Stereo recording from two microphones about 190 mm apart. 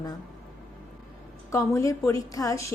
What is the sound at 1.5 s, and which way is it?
A woman's voice, 15° left (ahead or behind).